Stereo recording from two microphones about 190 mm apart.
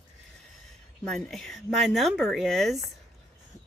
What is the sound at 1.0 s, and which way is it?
Speech, 5° left (ahead or behind).